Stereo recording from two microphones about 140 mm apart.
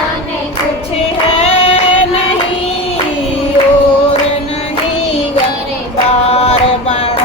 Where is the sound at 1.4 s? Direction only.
50° left (ahead or behind).